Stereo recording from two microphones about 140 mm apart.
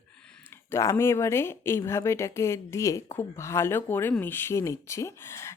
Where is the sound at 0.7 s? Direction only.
20° left (ahead or behind).